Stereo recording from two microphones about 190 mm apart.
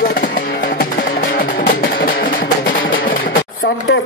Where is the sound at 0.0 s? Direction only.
50° left (ahead or behind).